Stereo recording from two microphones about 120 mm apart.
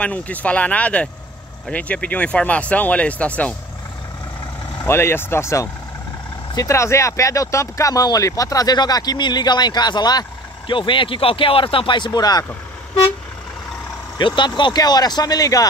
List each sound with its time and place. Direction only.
0.0 s speech: 15° left (ahead or behind)
4.8 s speech: 20° left (ahead or behind)
14.1 s speech: 40° left (ahead or behind)